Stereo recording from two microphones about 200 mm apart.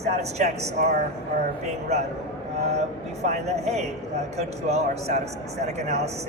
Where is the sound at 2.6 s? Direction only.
35° right (ahead or behind).